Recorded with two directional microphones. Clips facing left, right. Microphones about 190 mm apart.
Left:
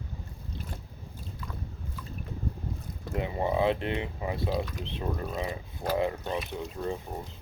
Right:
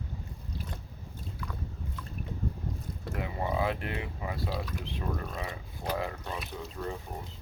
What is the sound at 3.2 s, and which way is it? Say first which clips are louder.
Speech: left 4 dB; 25° left (ahead or behind).